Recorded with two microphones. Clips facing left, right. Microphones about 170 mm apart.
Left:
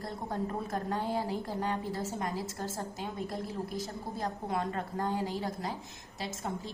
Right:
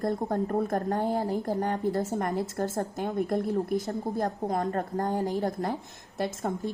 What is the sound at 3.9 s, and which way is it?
A woman's voice, 45° right (ahead or behind).